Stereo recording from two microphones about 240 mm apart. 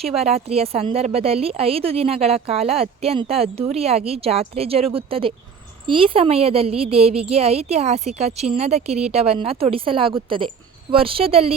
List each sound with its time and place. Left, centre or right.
0.2 s speech: right